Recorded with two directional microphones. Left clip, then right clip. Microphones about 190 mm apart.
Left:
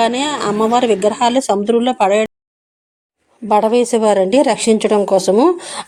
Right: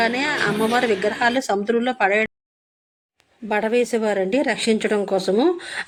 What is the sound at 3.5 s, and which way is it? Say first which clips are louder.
A woman's voice: left 7 dB; 25° left (ahead or behind).